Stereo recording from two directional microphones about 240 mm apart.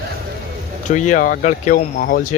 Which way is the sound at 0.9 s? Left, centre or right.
Left.